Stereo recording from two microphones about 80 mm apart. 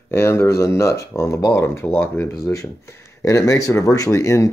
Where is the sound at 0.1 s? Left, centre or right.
Left.